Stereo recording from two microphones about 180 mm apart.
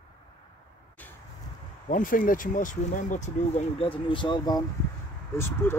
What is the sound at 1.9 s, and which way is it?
Speech, 50° left (ahead or behind).